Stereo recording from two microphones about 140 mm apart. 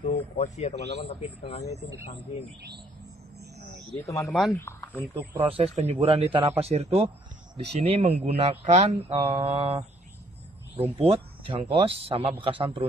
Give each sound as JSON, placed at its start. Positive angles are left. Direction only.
{"t": 0.0, "sound": "a man's voice", "side_deg": 60}
{"t": 3.9, "sound": "speech", "side_deg": 20}
{"t": 4.3, "sound": "speech", "side_deg": 0}
{"t": 4.6, "sound": "speech", "side_deg": 15}
{"t": 5.5, "sound": "speech", "side_deg": -50}
{"t": 10.8, "sound": "a man's voice", "side_deg": -40}